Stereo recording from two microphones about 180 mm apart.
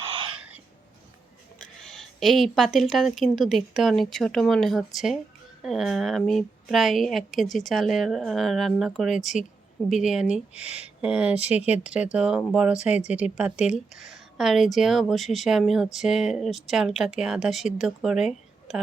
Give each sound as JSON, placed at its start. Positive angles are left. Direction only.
{"t": 0.0, "sound": "throat clearing", "side_deg": -30}
{"t": 0.3, "sound": "throat clearing", "side_deg": -10}
{"t": 1.5, "sound": "a woman's voice", "side_deg": 5}
{"t": 10.5, "sound": "speech", "side_deg": 35}
{"t": 10.8, "sound": "a woman's voice", "side_deg": -5}